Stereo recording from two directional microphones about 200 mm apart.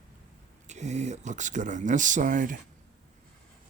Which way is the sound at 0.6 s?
35° right (ahead or behind).